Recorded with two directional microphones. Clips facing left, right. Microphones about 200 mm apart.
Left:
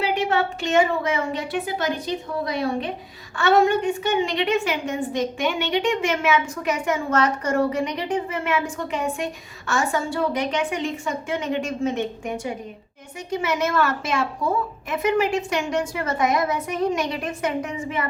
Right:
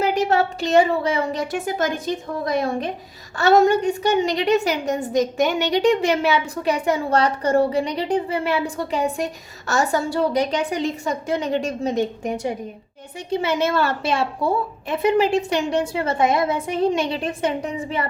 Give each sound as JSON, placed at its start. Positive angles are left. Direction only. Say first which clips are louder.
{"t": 0.0, "sound": "a woman's voice", "louder": "right 3 dB", "side_deg": -40}